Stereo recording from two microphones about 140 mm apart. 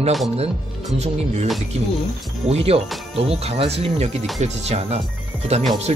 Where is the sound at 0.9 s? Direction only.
50° right (ahead or behind).